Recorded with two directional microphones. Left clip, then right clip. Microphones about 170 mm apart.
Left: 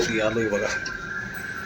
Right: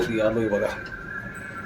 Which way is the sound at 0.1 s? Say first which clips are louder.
Even; 10° right (ahead or behind).